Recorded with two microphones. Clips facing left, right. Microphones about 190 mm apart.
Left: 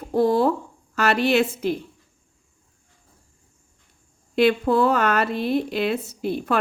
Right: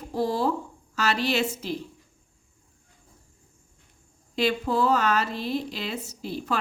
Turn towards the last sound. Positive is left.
turn(degrees=60)  # may be behind; listen again after turning